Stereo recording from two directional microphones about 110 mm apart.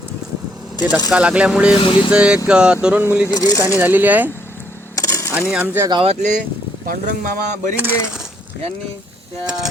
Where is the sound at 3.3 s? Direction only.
30° left (ahead or behind).